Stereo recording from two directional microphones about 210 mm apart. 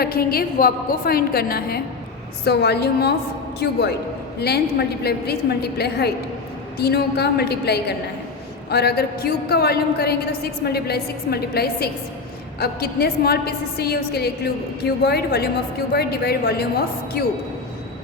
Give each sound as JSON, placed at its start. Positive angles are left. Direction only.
{"t": 0.0, "sound": "a woman's voice", "side_deg": 45}